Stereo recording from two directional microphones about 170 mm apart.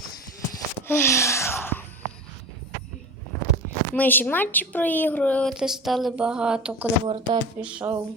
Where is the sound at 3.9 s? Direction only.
10° left (ahead or behind); by 6.8 s 5° right (ahead or behind).